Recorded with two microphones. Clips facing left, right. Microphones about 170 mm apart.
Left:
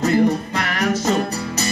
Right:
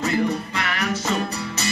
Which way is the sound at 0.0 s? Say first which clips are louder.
Left 6 dB; 40° left (ahead or behind).